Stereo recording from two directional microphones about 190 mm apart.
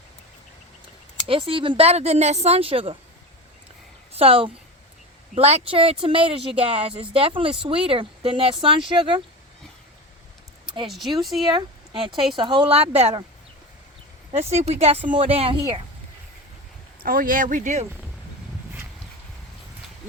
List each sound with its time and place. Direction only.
1.3 s speech: 30° right (ahead or behind)
4.1 s speech: 30° right (ahead or behind)
10.8 s speech: centre (ahead or behind)
11.5 s speech: 25° right (ahead or behind)
14.3 s speech: 35° right (ahead or behind)
17.0 s speech: 50° right (ahead or behind)